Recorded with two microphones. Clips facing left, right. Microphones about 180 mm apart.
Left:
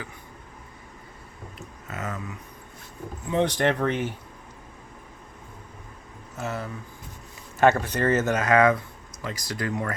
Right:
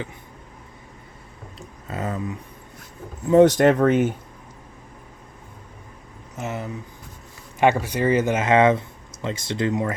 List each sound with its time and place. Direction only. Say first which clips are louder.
1.5 s a sound: right 5 dB; 30° right (ahead or behind)
3.3 s speech: right 9 dB; 45° right (ahead or behind)
6.3 s speech: right 2 dB; 20° right (ahead or behind)